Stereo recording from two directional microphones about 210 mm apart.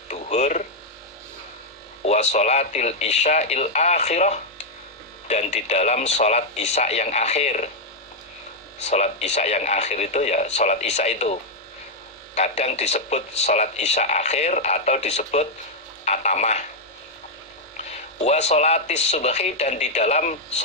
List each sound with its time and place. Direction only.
0.1 s a sound: 35° left (ahead or behind)
2.0 s speech: 30° left (ahead or behind)
8.8 s speech: 30° left (ahead or behind)
18.2 s speech: 30° left (ahead or behind)